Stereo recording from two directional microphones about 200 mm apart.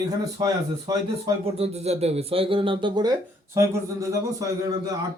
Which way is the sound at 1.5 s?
30° right (ahead or behind).